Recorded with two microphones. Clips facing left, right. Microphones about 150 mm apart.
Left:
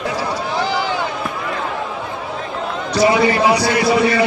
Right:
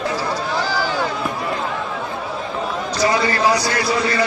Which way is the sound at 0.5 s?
20° left (ahead or behind).